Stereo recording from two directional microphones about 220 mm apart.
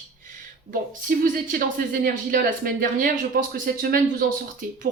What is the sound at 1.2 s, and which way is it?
Speech, 40° right (ahead or behind).